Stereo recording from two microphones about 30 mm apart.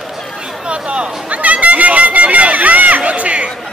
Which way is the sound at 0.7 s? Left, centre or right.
Right.